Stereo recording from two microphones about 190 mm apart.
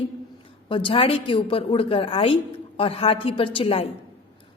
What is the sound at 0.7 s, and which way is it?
A woman's voice, 25° left (ahead or behind).